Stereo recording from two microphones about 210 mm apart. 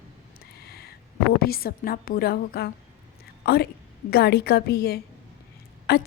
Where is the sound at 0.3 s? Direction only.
50° left (ahead or behind).